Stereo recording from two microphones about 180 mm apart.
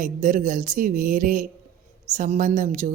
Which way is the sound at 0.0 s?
45° right (ahead or behind).